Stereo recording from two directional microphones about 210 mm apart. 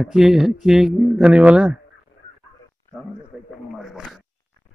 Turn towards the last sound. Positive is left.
turn(degrees=0)  # may be behind; listen again after turning